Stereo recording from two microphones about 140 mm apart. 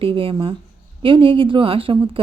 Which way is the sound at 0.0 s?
40° right (ahead or behind).